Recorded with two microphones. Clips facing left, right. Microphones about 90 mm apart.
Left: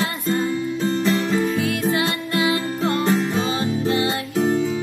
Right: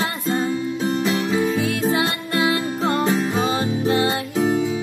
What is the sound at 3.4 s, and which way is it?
Music, 30° right (ahead or behind).